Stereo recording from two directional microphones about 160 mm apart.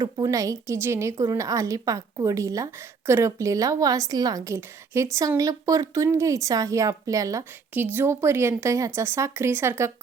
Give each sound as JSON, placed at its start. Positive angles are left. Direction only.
{"t": 0.0, "sound": "a woman's voice", "side_deg": -20}